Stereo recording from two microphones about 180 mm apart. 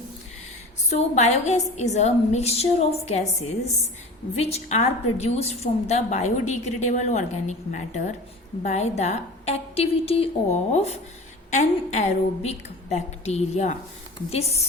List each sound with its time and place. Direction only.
0.9 s a woman's voice: 40° left (ahead or behind)